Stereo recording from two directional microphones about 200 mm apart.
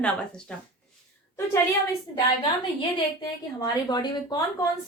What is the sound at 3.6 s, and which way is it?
Speech, 20° left (ahead or behind).